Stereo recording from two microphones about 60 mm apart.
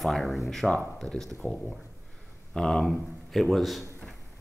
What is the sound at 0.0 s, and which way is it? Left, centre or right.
Speech, centre.